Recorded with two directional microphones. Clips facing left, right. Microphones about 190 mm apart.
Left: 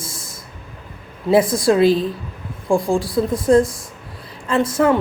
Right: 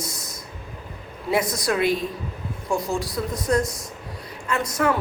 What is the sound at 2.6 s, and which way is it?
Speech, 50° left (ahead or behind).